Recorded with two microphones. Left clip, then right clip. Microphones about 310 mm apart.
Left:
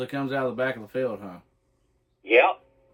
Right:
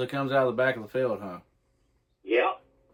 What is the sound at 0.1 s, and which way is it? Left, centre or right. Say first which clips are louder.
Speech: right 5 dB; centre.